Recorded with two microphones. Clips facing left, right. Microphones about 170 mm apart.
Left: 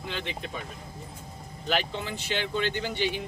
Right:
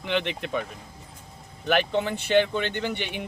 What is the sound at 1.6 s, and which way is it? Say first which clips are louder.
Speech: right 6 dB; 60° right (ahead or behind).